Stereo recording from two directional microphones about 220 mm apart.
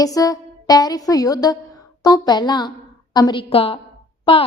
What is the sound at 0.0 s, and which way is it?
A woman's voice, 15° left (ahead or behind).